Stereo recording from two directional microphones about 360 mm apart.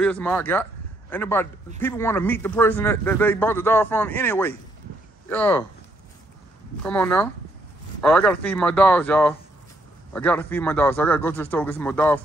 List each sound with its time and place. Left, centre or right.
0.0 s speech: centre
6.8 s speech: centre